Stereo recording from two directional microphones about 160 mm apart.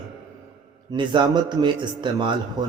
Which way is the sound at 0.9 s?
30° right (ahead or behind).